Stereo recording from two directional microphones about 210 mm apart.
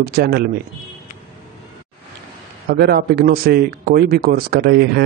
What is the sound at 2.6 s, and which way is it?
Speech, 50° right (ahead or behind).